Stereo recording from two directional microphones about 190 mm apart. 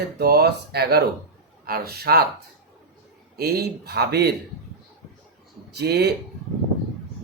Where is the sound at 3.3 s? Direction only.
55° right (ahead or behind).